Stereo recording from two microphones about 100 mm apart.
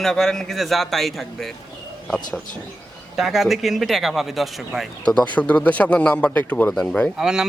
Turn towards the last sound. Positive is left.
turn(degrees=-5)  # may be behind; listen again after turning